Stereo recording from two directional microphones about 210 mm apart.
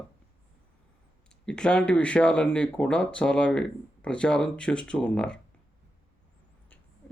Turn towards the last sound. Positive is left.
turn(degrees=5)  # may be behind; listen again after turning